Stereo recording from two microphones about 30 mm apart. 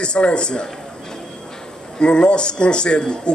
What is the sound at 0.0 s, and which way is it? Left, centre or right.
Speech, left.